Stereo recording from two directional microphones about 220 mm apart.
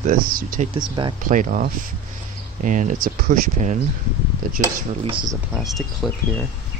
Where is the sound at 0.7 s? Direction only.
20° right (ahead or behind).